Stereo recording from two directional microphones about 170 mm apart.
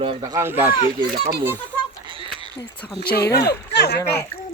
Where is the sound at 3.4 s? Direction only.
75° left (ahead or behind).